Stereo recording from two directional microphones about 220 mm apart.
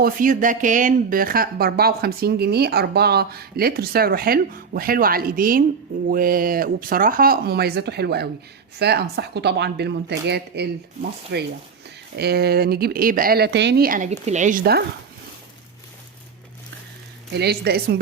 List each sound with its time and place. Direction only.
0.0 s speech: 40° right (ahead or behind)
17.3 s speech: 50° right (ahead or behind)